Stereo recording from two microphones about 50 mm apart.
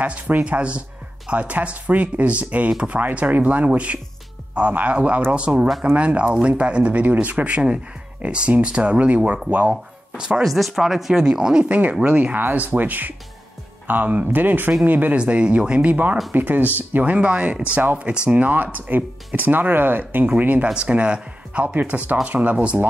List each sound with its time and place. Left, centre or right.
0.0 s speech: right
10.4 s speech: centre
11.7 s speech: right
12.4 s speech: right
15.1 s speech: right
20.6 s speech: centre; by 22.6 s right